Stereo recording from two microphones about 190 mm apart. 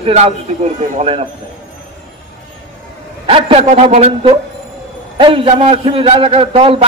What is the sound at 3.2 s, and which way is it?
A man's voice, 30° right (ahead or behind).